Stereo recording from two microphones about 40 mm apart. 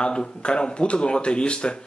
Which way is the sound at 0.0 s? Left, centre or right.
Left.